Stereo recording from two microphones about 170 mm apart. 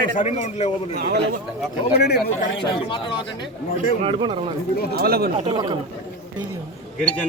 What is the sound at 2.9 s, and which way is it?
Speech, 30° left (ahead or behind).